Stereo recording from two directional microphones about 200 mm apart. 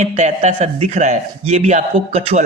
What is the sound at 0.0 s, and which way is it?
A man's voice, 35° right (ahead or behind).